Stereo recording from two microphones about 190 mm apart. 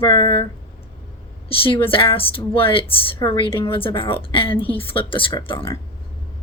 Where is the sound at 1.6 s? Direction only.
30° left (ahead or behind).